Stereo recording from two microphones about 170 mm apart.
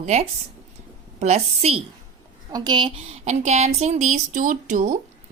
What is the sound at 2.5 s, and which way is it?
Speech, 25° right (ahead or behind).